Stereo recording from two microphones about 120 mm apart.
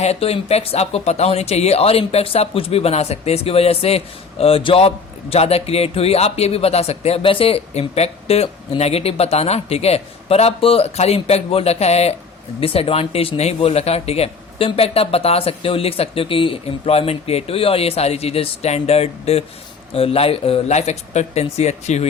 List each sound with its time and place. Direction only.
0.0 s speech: 60° left (ahead or behind)
12.5 s speech: 50° left (ahead or behind); by 22.0 s 70° left (ahead or behind)